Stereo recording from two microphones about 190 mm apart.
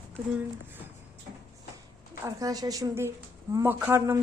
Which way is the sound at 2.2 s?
20° right (ahead or behind).